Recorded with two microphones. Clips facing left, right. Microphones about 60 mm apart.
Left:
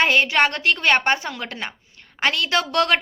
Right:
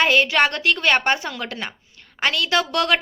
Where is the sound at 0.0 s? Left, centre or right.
Left.